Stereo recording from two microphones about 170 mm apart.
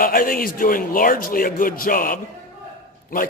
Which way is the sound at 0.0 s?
55° left (ahead or behind).